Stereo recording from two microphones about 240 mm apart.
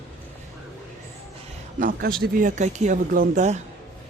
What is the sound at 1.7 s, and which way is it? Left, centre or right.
Speech, right.